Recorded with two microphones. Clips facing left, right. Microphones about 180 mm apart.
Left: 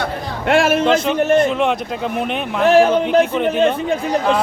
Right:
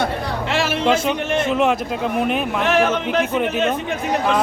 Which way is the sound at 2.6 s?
35° left (ahead or behind).